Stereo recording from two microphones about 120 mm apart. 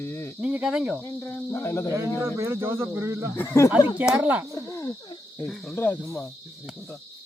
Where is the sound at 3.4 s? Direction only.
25° left (ahead or behind).